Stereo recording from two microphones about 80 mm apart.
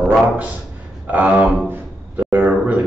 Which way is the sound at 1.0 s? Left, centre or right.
Centre.